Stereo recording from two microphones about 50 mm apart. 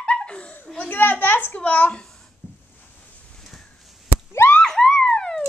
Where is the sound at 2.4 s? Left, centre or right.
Left.